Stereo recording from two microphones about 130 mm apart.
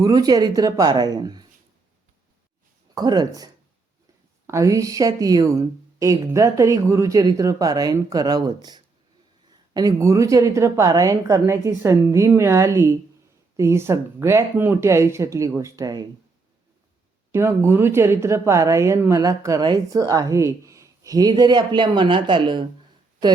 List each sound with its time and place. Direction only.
0.0 s speech: 30° right (ahead or behind)
2.9 s speech: 30° right (ahead or behind)
17.3 s speech: 20° right (ahead or behind); by 22.6 s 40° right (ahead or behind)